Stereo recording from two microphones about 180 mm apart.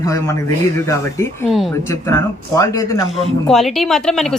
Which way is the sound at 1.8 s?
15° left (ahead or behind).